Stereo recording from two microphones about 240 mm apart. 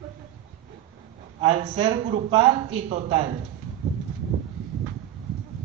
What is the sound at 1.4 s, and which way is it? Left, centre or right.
A man's voice, centre.